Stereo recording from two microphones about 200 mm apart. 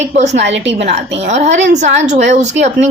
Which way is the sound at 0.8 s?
30° right (ahead or behind).